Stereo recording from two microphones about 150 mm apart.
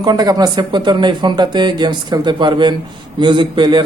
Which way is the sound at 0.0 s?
25° right (ahead or behind).